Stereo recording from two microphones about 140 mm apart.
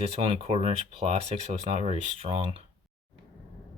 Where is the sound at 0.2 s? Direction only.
45° right (ahead or behind).